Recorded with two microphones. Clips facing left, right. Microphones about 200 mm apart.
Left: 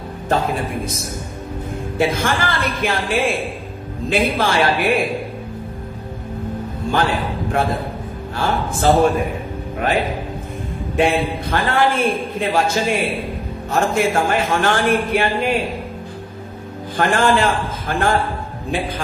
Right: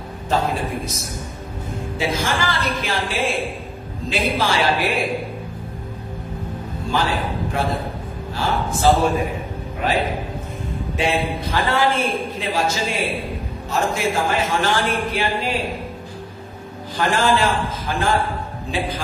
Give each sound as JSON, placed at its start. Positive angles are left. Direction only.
{"t": 2.0, "sound": "a man's voice", "side_deg": 50}
{"t": 6.9, "sound": "a man's voice", "side_deg": 55}
{"t": 8.7, "sound": "a man's voice", "side_deg": 50}
{"t": 11.0, "sound": "a man's voice", "side_deg": 55}
{"t": 12.8, "sound": "a man's voice", "side_deg": 0}
{"t": 13.7, "sound": "a man's voice", "side_deg": 55}
{"t": 16.9, "sound": "a man's voice", "side_deg": 55}